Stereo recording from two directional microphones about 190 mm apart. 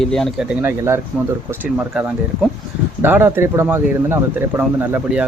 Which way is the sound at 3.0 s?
10° right (ahead or behind).